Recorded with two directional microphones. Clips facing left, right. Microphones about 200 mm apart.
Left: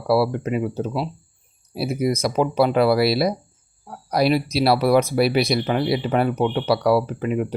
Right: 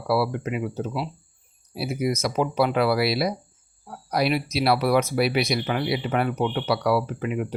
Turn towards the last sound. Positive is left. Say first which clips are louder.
# left 4 dB
turn(degrees=35)  # may be behind; listen again after turning